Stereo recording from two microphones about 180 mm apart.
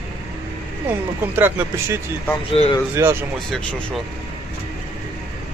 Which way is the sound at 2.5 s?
30° left (ahead or behind).